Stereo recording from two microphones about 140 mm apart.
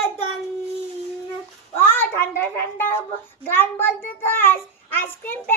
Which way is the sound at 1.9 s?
15° left (ahead or behind).